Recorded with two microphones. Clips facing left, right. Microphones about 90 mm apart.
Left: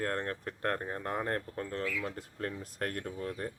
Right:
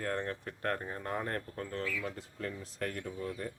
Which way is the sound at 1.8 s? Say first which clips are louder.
Left 2 dB; 50° left (ahead or behind).